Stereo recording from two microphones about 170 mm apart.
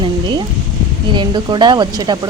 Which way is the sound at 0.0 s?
30° right (ahead or behind).